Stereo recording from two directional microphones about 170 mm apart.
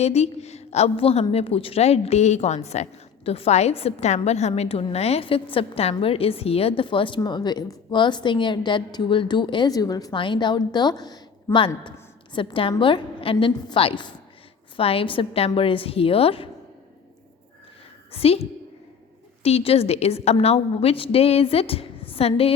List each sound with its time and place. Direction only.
0.0 s a woman's voice: 40° left (ahead or behind)
18.1 s a woman's voice: 35° left (ahead or behind)